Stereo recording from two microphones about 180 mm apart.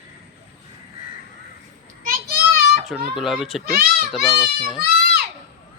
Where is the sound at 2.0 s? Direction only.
60° right (ahead or behind).